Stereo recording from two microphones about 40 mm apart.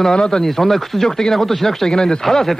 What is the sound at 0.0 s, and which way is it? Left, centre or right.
Speech, centre.